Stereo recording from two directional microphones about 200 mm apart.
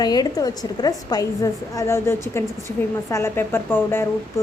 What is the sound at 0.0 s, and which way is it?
A woman's voice, 20° left (ahead or behind).